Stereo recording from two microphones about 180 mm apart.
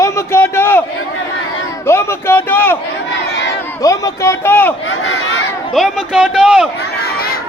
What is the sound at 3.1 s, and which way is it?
Crowd, 80° left.